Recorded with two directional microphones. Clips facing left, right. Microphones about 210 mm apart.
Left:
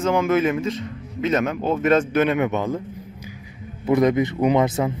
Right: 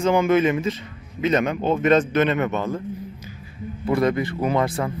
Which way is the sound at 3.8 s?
20° left (ahead or behind).